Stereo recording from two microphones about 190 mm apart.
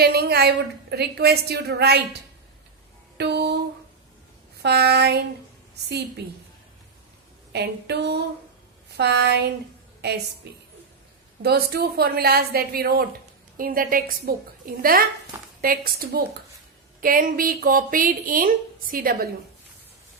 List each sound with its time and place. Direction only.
0.0 s a woman's voice: 55° right (ahead or behind)
3.2 s a sound: 60° right (ahead or behind)
4.6 s a woman's voice: 60° right (ahead or behind)
7.5 s a woman's voice: 60° right (ahead or behind)
10.4 s a woman's voice: 60° right (ahead or behind)